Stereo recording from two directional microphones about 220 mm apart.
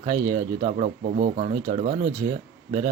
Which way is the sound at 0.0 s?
20° right (ahead or behind).